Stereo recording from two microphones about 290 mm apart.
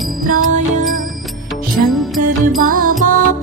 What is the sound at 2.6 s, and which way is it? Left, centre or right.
Music, right.